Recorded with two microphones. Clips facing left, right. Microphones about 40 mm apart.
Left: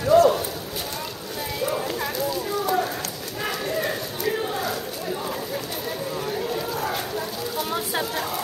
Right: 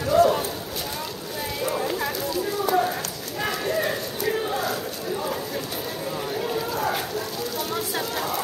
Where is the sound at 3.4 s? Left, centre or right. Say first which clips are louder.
Right 2 dB; centre.